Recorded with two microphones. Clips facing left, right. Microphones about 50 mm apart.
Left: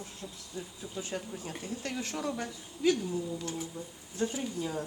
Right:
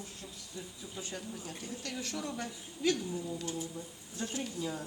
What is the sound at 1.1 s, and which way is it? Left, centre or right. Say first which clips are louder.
Speech: left 4 dB; left.